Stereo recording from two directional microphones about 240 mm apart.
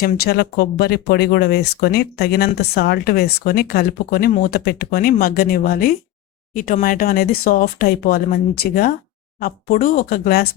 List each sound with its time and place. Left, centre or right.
0.0 s speech: left